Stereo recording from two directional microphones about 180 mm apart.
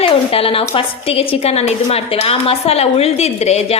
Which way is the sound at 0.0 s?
30° left (ahead or behind).